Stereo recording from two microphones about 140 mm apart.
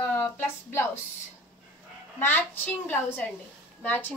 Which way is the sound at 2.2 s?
15° left (ahead or behind).